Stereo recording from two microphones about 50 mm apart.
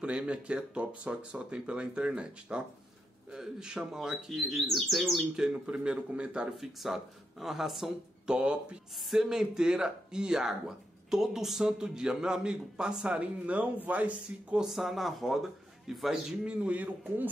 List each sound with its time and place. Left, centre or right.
0.3 s a man's voice: right
4.5 s a man's voice: centre
5.3 s speech: centre
6.6 s a man's voice: centre
8.3 s a man's voice: centre
13.2 s speech: right
14.6 s a man's voice: centre
16.4 s speech: right